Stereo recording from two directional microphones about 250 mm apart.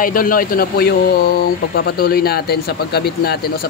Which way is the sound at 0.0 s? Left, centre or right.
Left.